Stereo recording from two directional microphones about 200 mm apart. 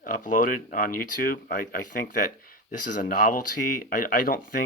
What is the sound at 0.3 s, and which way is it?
Speech, 45° left (ahead or behind).